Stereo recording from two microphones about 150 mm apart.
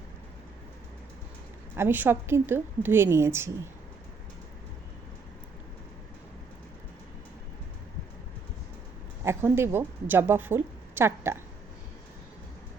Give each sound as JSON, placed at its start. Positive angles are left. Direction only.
{"t": 1.7, "sound": "a woman's voice", "side_deg": -15}
{"t": 9.2, "sound": "a woman's voice", "side_deg": -15}